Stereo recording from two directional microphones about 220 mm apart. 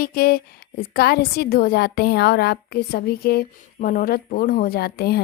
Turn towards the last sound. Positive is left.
turn(degrees=45)  # may be behind; listen again after turning